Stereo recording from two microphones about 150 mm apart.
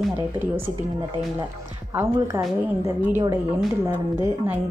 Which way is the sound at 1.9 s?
15° right (ahead or behind).